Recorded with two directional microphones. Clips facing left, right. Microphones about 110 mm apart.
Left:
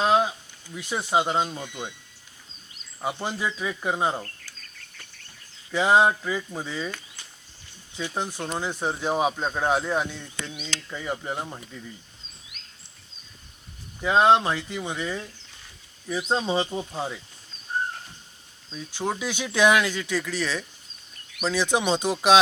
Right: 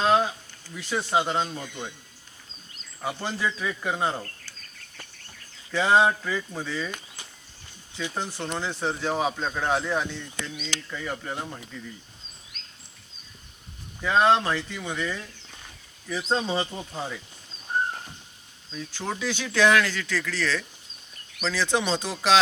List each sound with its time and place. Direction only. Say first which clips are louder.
0.0 s a sound: left 1 dB; 15° left (ahead or behind)
0.7 s speech: left 1 dB; 15° left (ahead or behind)
5.7 s speech: left 1 dB; 15° left (ahead or behind)
8.1 s speech: left 2 dB; 15° left (ahead or behind)
14.0 s speech: left 2 dB; 20° left (ahead or behind)
18.7 s speech: left 3 dB; 15° left (ahead or behind)